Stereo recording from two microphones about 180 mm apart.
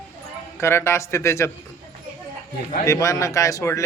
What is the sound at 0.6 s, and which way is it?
Speech, 15° left (ahead or behind).